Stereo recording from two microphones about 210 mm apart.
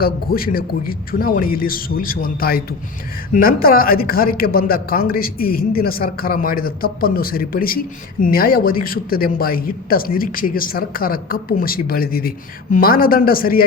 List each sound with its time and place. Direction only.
0.0 s speech: 45° left (ahead or behind)